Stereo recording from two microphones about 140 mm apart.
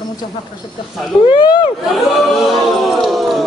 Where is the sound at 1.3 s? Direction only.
35° left (ahead or behind).